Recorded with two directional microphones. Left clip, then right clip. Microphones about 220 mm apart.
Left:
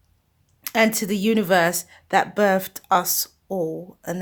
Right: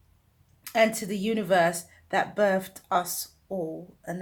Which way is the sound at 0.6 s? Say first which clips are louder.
Left 3 dB; 45° left (ahead or behind).